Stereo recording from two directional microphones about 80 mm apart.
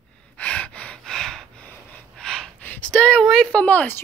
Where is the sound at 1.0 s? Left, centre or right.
Centre.